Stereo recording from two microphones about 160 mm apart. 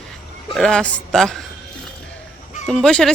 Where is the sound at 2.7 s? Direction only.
Centre (ahead or behind).